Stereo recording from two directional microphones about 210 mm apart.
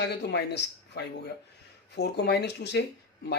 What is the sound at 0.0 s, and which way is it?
Speech, 55° left (ahead or behind).